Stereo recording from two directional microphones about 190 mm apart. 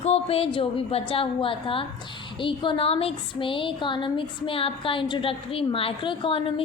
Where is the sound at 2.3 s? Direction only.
25° left (ahead or behind).